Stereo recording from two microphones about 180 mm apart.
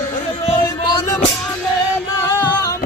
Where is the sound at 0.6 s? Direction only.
20° left (ahead or behind).